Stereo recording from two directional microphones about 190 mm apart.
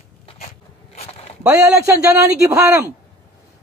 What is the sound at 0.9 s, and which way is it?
Zipper, 35° left (ahead or behind).